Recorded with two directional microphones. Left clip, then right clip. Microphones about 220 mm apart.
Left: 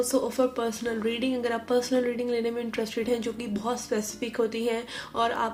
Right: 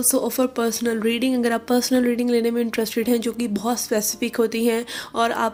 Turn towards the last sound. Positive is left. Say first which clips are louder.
# right 5 dB
turn(degrees=-45)  # may be behind; listen again after turning